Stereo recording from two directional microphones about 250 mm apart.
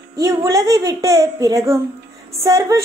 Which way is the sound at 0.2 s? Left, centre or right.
Centre.